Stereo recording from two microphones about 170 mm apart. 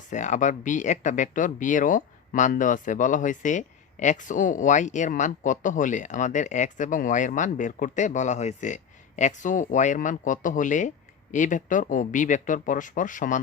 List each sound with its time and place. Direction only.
0.1 s speech: 45° left (ahead or behind)